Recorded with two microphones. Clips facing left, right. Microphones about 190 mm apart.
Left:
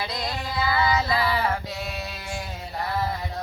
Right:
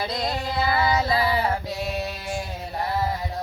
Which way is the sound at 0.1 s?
25° right (ahead or behind).